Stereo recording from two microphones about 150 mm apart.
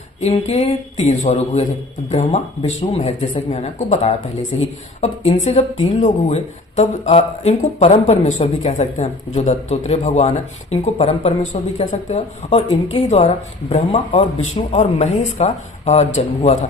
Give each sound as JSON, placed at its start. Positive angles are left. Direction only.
{"t": 0.2, "sound": "speech", "side_deg": 45}
{"t": 12.5, "sound": "speech", "side_deg": 35}